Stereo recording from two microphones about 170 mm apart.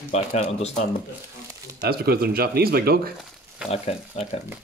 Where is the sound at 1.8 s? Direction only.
65° right (ahead or behind).